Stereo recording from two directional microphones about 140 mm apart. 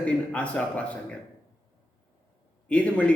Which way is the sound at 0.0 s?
10° left (ahead or behind).